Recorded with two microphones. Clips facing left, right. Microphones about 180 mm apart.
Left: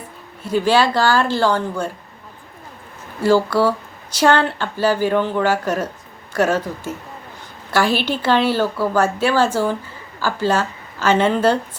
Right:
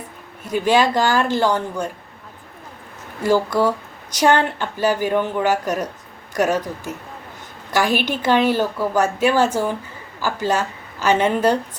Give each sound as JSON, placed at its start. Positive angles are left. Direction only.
{"t": 0.4, "sound": "a woman's voice", "side_deg": -20}
{"t": 3.2, "sound": "a woman's voice", "side_deg": -15}
{"t": 7.7, "sound": "a woman's voice", "side_deg": -15}